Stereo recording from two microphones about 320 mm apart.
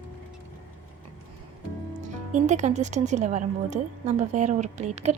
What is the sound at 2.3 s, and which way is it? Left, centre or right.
A woman's voice, right.